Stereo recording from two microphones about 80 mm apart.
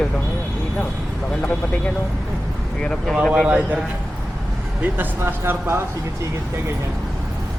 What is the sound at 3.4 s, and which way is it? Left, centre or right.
Speech, centre.